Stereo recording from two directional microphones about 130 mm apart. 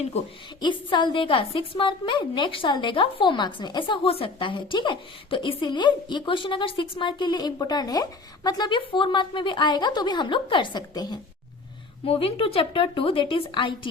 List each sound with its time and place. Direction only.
0.6 s a woman's voice: 35° left (ahead or behind)
12.0 s a woman's voice: 45° left (ahead or behind)